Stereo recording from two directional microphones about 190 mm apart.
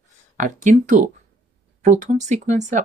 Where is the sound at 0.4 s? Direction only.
40° right (ahead or behind).